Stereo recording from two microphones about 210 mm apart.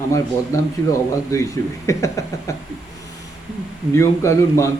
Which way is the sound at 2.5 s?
15° left (ahead or behind).